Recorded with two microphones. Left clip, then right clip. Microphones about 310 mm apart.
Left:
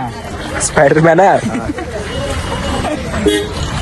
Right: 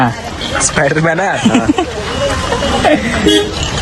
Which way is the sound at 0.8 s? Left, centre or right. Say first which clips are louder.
Left 6 dB; centre.